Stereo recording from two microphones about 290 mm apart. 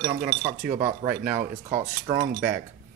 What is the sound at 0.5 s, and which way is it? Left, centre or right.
Speech, right.